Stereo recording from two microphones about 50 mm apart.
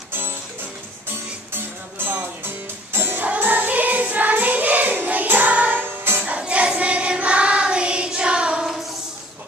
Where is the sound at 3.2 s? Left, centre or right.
Right.